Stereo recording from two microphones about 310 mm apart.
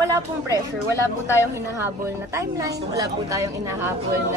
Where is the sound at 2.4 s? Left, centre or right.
Centre.